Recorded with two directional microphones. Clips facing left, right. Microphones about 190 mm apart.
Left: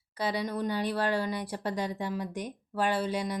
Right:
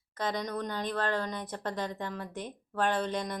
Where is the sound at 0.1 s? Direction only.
10° left (ahead or behind).